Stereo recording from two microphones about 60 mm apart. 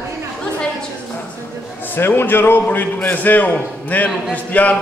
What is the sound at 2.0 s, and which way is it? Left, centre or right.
A man's voice, left.